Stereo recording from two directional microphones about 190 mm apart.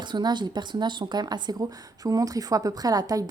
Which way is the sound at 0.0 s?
25° right (ahead or behind).